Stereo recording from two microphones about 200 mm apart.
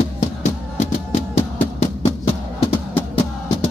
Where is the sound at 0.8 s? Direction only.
30° left (ahead or behind).